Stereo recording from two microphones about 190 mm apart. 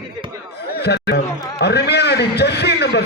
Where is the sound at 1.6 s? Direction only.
60° left (ahead or behind).